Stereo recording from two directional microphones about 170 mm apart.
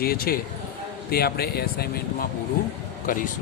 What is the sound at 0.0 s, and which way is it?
Speech, 60° left (ahead or behind).